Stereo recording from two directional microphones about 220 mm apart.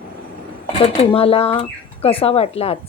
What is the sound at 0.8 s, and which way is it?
Speech, 25° left (ahead or behind).